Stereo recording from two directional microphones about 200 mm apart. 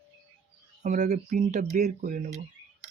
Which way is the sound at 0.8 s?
35° right (ahead or behind).